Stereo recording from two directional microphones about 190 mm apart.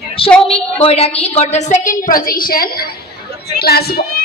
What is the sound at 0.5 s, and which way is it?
A woman's voice, 30° left (ahead or behind).